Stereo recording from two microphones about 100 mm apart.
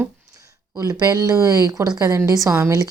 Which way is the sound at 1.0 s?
40° right (ahead or behind).